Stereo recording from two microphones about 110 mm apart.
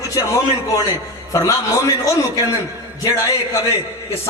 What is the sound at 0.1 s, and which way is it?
A man's voice, 30° left (ahead or behind).